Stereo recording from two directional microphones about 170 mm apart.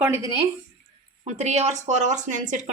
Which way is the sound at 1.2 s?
40° right (ahead or behind).